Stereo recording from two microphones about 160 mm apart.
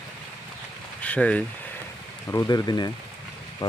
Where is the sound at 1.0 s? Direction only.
10° left (ahead or behind).